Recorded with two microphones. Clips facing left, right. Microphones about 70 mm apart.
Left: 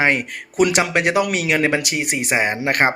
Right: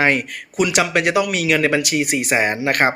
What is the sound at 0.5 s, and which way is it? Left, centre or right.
Speech, left.